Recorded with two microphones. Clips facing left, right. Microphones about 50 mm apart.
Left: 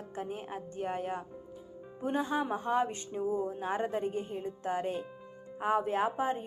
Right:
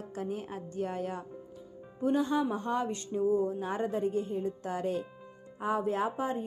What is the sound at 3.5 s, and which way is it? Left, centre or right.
Speech, left.